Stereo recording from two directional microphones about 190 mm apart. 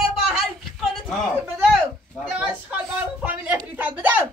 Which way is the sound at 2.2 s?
5° right (ahead or behind).